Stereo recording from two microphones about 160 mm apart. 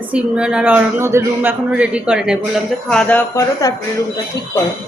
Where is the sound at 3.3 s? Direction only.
20° left (ahead or behind).